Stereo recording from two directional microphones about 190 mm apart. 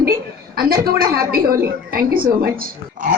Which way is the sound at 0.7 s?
50° right (ahead or behind).